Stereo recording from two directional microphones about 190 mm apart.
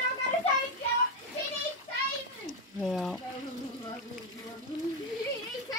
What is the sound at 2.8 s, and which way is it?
Speech, centre (ahead or behind).